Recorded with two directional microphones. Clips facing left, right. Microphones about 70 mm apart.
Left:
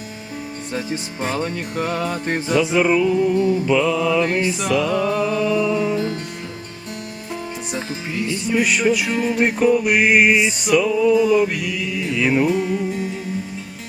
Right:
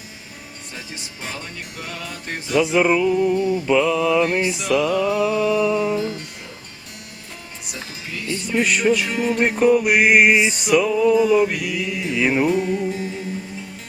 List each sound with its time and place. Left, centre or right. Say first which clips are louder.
0.7 s music: left 10 dB; left
2.6 s music: right 1 dB; centre
3.2 s a sound: left 2 dB; centre
3.7 s music: even; centre
4.9 s music: even; left
5.1 s a sound: even; centre
7.7 s speech: left 4 dB; left
8.4 s music: even; centre